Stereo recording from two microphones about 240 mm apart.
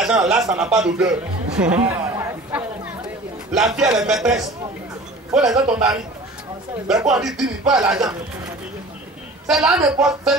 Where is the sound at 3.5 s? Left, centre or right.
Centre.